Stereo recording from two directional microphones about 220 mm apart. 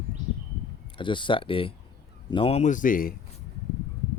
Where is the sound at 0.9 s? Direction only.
20° left (ahead or behind); by 3.2 s 40° left (ahead or behind).